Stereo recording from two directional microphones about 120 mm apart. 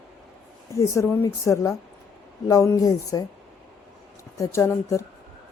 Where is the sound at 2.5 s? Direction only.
25° left (ahead or behind).